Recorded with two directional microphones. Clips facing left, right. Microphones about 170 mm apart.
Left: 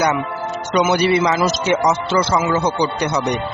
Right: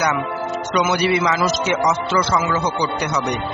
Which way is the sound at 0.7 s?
30° left (ahead or behind).